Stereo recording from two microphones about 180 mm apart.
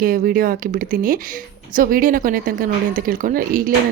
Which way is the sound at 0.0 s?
50° right (ahead or behind).